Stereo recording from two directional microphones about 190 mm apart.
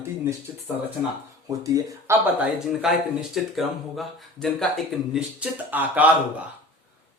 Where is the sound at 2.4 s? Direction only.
5° right (ahead or behind).